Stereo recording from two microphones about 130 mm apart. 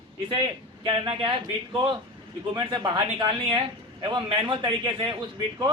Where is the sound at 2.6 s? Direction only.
35° right (ahead or behind).